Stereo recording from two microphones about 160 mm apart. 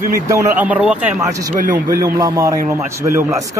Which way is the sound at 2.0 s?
20° right (ahead or behind).